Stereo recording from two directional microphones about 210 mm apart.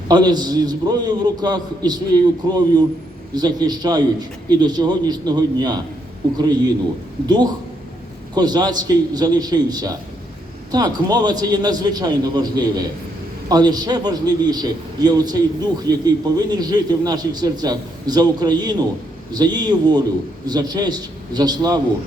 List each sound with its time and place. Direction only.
0.1 s a man's voice: 20° right (ahead or behind)